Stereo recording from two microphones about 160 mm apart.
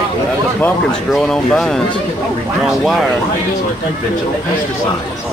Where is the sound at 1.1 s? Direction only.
5° left (ahead or behind).